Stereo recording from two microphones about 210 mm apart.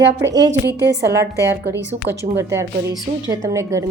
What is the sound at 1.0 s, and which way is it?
Music, 15° right (ahead or behind).